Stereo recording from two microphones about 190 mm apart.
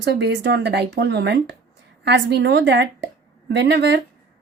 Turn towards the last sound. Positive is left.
turn(degrees=-65)  # may be behind; listen again after turning